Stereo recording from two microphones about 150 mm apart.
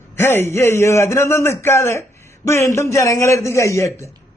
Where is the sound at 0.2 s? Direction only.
15° left (ahead or behind).